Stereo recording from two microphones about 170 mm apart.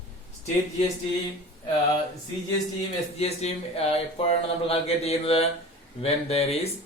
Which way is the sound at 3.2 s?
35° left (ahead or behind).